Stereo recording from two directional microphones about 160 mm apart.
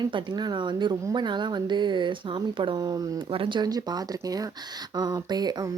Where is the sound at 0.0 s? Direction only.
30° right (ahead or behind).